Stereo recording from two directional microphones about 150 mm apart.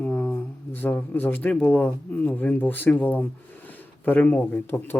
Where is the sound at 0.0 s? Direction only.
10° left (ahead or behind).